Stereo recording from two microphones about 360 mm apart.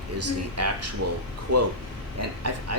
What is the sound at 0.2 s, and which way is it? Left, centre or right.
Speech, right.